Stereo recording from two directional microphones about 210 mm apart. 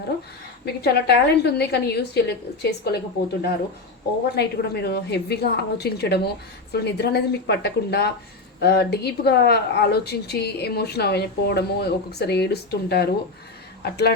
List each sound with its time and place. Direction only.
0.6 s speech: 50° left (ahead or behind)
4.4 s speech: 50° left (ahead or behind)